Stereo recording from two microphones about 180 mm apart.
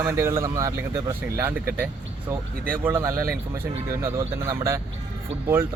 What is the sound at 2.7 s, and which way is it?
Speech, 15° right (ahead or behind).